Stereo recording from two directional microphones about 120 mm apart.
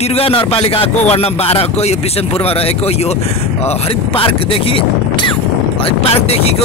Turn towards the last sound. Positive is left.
turn(degrees=60)  # may be behind; listen again after turning